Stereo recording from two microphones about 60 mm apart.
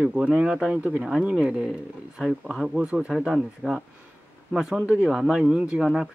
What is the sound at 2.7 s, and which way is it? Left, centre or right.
Speech, centre.